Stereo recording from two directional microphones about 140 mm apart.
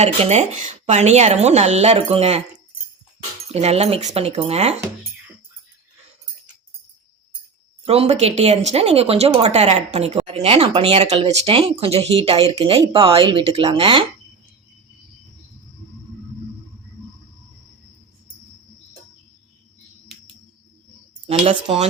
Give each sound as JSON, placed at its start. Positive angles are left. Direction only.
{"t": 0.0, "sound": "speech", "side_deg": -55}
{"t": 2.0, "sound": "speech", "side_deg": -40}
{"t": 3.5, "sound": "speech", "side_deg": -45}
{"t": 7.9, "sound": "speech", "side_deg": -45}
{"t": 21.2, "sound": "speech", "side_deg": -40}